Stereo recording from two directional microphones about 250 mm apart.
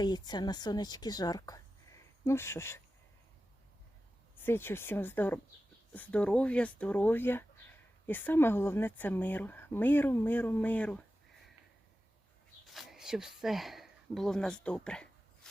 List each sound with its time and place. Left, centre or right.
0.0 s speech: centre
4.4 s speech: centre
12.7 s speech: centre